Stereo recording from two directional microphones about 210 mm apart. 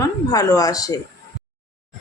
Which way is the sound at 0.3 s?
15° left (ahead or behind).